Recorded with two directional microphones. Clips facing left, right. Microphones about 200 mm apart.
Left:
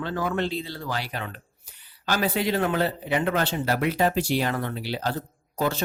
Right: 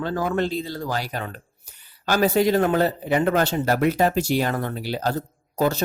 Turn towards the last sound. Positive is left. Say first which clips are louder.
# right 4 dB
turn(degrees=-40)  # may be behind; listen again after turning